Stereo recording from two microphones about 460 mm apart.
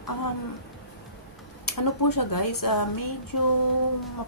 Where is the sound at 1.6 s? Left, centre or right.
Left.